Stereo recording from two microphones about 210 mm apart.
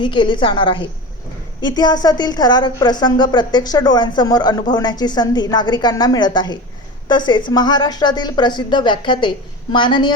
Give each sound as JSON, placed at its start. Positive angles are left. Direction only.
{"t": 0.0, "sound": "a woman's voice", "side_deg": 25}